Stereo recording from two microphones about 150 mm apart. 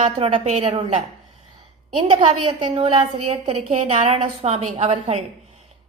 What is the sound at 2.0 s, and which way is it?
A woman's voice, 35° right (ahead or behind).